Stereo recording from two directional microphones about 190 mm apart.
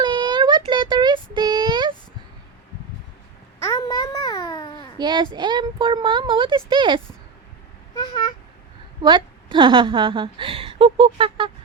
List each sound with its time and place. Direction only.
0.0 s child singing: 25° right (ahead or behind)
3.7 s babbling: 20° left (ahead or behind)
4.9 s a woman's voice: 25° right (ahead or behind)
9.0 s a woman's voice: 25° right (ahead or behind)